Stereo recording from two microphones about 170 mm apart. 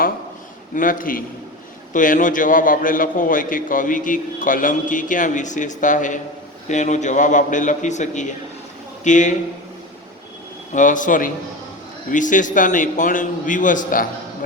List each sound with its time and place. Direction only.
0.8 s a man's voice: 55° left (ahead or behind)
10.8 s a man's voice: 50° left (ahead or behind)